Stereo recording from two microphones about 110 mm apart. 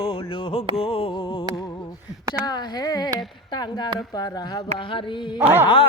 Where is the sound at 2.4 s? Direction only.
40° left (ahead or behind).